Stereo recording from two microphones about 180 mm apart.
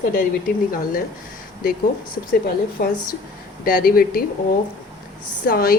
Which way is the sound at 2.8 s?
55° left (ahead or behind).